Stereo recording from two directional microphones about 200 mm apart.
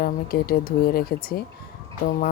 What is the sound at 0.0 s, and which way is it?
A woman's voice, 50° left (ahead or behind).